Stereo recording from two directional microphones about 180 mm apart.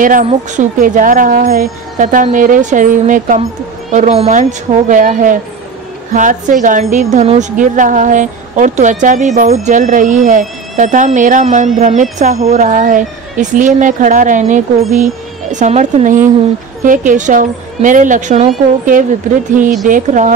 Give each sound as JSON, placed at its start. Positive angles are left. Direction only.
{"t": 0.0, "sound": "speech", "side_deg": -45}
{"t": 19.5, "sound": "speech", "side_deg": -45}